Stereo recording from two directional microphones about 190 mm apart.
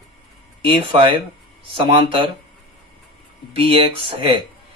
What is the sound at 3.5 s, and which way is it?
Speech, 30° right (ahead or behind).